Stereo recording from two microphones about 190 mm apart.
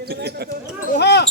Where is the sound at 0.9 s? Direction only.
65° left (ahead or behind).